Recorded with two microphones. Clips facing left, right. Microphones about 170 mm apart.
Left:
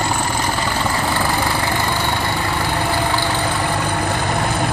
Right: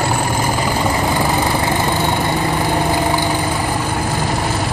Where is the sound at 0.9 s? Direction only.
20° right (ahead or behind).